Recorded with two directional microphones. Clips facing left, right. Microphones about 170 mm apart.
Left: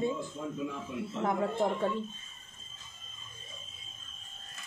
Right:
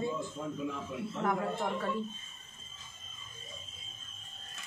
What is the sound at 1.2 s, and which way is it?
Speech, 25° left (ahead or behind).